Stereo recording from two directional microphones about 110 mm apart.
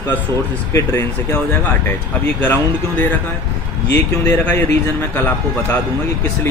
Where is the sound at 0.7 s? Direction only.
25° left (ahead or behind).